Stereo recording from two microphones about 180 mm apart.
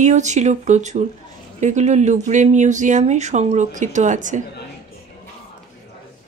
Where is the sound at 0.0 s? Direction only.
40° right (ahead or behind).